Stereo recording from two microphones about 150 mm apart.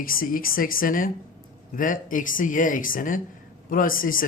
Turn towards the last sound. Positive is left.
turn(degrees=70)  # may be behind; listen again after turning